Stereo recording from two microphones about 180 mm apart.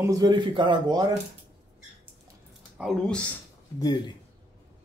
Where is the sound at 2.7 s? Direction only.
Centre (ahead or behind).